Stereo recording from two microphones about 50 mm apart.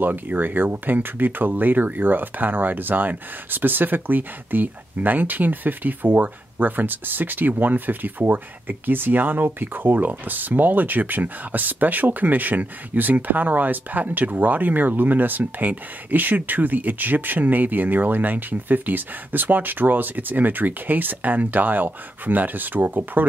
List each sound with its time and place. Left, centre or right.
0.0 s speech: right